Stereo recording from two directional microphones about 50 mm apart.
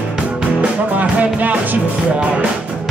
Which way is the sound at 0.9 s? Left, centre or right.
Right.